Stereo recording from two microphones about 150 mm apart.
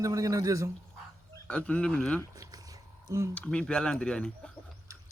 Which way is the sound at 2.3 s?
25° right (ahead or behind).